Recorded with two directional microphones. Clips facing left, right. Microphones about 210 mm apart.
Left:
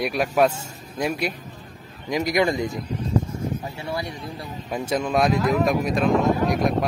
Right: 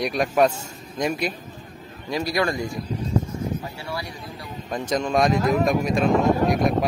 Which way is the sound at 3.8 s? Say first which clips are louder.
Left 3 dB; 20° left (ahead or behind).